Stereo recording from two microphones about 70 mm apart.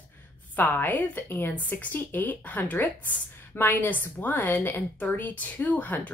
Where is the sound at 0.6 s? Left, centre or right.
Left.